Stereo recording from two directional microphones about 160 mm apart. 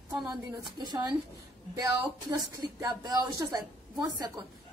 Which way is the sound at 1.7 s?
25° right (ahead or behind).